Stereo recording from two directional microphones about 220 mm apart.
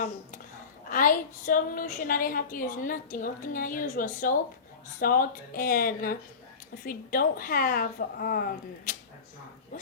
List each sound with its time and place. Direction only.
0.9 s a woman's voice: 40° left (ahead or behind)